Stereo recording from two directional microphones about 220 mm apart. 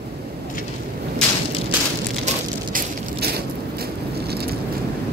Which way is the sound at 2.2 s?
40° right (ahead or behind).